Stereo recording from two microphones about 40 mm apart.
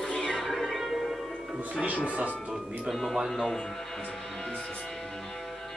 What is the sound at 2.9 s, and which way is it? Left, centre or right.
Speech, centre.